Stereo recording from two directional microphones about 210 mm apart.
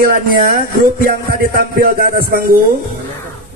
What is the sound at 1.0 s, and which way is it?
Music, 40° right (ahead or behind).